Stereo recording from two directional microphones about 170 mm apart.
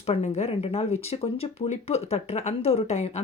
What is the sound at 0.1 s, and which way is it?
Speech, 35° left (ahead or behind).